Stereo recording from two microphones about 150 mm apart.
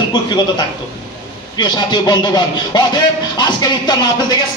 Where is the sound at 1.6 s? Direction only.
30° left (ahead or behind).